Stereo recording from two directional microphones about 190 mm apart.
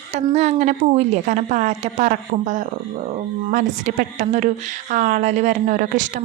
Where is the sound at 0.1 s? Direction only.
35° right (ahead or behind).